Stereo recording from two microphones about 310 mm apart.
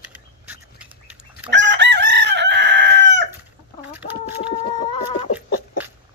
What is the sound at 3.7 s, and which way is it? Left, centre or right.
Chicken, centre.